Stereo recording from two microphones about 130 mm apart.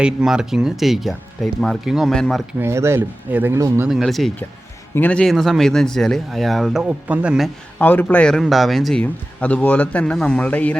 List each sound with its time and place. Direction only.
0.0 s speech: 5° right (ahead or behind)
2.6 s speech: 20° right (ahead or behind)
3.8 s speech: centre (ahead or behind)
6.8 s speech: 10° right (ahead or behind)
7.8 s a man's voice: 15° left (ahead or behind)